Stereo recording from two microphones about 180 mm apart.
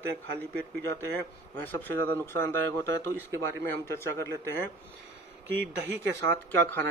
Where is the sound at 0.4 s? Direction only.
10° left (ahead or behind).